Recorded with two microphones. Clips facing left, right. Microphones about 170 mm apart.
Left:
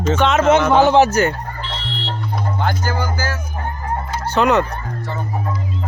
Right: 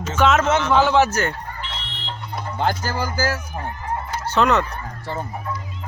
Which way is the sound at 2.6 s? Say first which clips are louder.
Right 1 dB; 30° right (ahead or behind).